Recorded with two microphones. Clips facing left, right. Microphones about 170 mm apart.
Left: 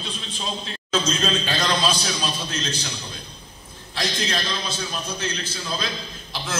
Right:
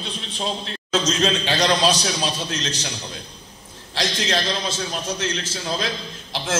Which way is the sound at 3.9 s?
90° right.